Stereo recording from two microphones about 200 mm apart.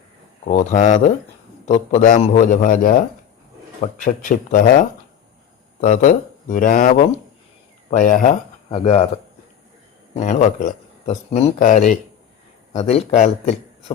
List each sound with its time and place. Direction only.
0.4 s speech: 35° left (ahead or behind)
10.2 s speech: 35° left (ahead or behind)